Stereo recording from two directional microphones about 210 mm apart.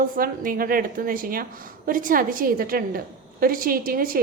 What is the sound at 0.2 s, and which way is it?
A woman's voice, 45° right (ahead or behind).